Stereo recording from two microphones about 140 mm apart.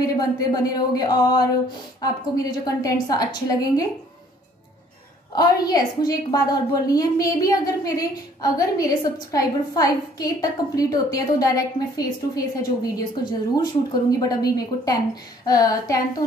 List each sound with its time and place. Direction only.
0.0 s a woman's voice: 25° left (ahead or behind)
5.3 s a woman's voice: 30° left (ahead or behind)